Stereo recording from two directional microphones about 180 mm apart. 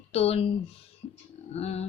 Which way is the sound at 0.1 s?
35° left (ahead or behind).